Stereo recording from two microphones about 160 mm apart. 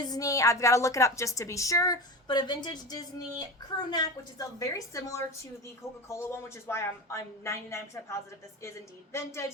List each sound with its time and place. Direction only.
0.0 s a woman's voice: 20° left (ahead or behind)